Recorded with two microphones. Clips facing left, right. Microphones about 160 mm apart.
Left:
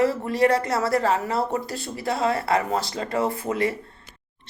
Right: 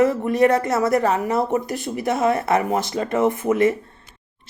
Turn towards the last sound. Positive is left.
turn(degrees=-20)  # may be behind; listen again after turning